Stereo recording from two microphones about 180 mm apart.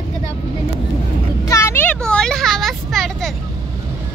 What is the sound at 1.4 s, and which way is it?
Vehicle, 15° left (ahead or behind).